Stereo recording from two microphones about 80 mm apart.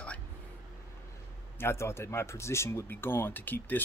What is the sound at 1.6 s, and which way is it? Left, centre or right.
Speech, left.